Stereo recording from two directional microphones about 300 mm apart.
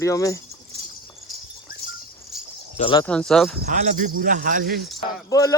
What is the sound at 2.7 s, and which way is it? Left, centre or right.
Speech, centre.